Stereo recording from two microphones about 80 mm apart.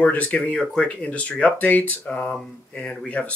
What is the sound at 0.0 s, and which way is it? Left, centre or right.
Speech, centre.